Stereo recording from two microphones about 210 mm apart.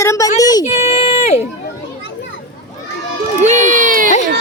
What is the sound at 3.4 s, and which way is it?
Speech, 35° right (ahead or behind).